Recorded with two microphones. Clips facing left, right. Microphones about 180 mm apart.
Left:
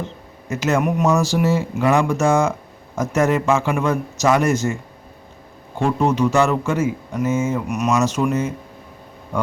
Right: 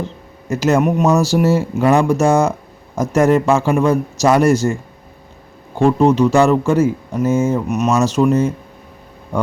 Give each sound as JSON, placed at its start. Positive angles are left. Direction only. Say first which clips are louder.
{"t": 0.5, "sound": "speech", "louder": "right 5 dB", "side_deg": -35}
{"t": 5.8, "sound": "speech", "louder": "right 6 dB", "side_deg": -30}